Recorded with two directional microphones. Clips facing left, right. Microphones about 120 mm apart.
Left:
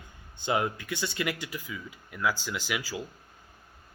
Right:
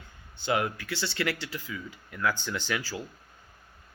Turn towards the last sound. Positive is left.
turn(degrees=10)  # may be behind; listen again after turning